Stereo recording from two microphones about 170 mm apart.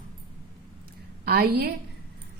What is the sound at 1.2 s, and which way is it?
Speech, 65° right (ahead or behind).